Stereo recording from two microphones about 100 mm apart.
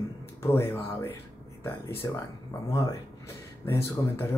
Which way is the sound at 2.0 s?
30° left (ahead or behind).